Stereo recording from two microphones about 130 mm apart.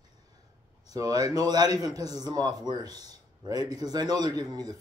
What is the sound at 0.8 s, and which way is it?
A man's voice, 30° right (ahead or behind).